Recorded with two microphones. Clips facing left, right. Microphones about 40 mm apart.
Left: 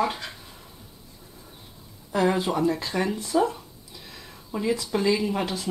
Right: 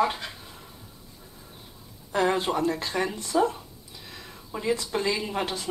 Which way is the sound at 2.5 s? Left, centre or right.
Centre.